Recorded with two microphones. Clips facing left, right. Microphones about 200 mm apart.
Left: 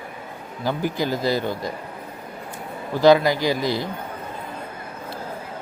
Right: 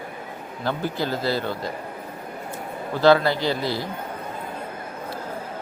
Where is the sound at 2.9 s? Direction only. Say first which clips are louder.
Left 2 dB; 15° left (ahead or behind).